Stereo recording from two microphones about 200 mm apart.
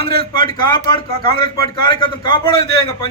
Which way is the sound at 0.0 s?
25° left (ahead or behind).